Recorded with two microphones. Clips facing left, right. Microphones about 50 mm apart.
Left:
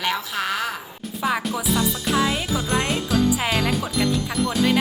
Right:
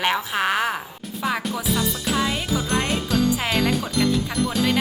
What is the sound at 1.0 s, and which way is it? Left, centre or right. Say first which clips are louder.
Music: left 2 dB; centre.